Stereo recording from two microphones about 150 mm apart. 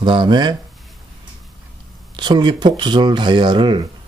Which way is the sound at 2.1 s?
30° right (ahead or behind).